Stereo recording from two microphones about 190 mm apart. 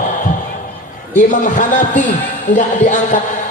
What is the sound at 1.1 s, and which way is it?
A man's voice, 40° left (ahead or behind).